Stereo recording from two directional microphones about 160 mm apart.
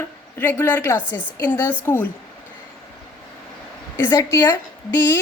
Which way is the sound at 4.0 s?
10° left (ahead or behind).